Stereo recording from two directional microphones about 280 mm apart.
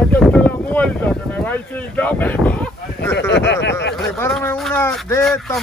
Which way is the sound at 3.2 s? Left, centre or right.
Left.